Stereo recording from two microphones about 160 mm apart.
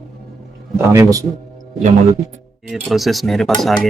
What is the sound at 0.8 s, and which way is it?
Speech, 15° right (ahead or behind).